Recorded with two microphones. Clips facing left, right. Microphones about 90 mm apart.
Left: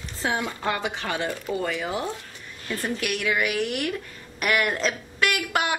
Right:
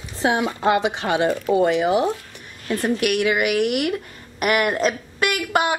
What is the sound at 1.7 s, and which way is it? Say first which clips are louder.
Speech: right 10 dB; 65° right (ahead or behind).